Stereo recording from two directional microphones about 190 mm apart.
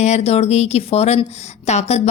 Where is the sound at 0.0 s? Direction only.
35° left (ahead or behind).